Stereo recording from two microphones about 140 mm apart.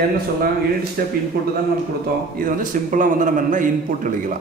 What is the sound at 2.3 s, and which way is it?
A man's voice, 75° right (ahead or behind).